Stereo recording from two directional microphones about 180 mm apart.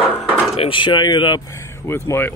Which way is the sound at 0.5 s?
30° left (ahead or behind).